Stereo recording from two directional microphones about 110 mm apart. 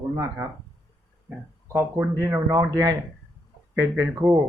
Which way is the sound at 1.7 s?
25° right (ahead or behind).